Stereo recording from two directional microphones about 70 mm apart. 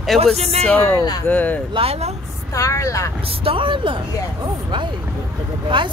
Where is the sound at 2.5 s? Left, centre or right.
Left.